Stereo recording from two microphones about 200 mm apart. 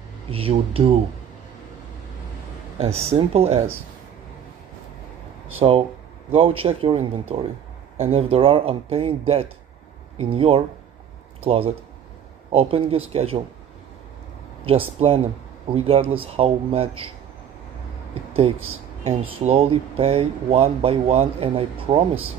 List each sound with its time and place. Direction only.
0.3 s speech: 30° right (ahead or behind)
2.8 s speech: 30° right (ahead or behind)
5.6 s speech: 25° right (ahead or behind)
14.6 s speech: 30° right (ahead or behind)
19.0 s speech: 30° right (ahead or behind)